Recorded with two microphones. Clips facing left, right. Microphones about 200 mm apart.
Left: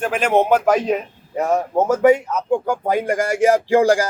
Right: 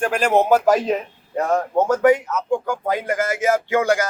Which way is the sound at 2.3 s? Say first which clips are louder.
Left 2 dB; 20° left (ahead or behind).